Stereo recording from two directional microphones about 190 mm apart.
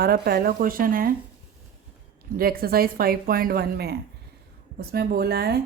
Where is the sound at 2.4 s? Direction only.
50° right (ahead or behind).